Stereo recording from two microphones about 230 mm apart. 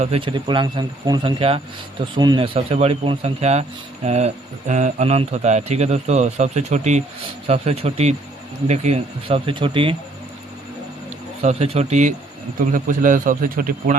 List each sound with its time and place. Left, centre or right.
0.0 s speech: right
11.4 s a man's voice: right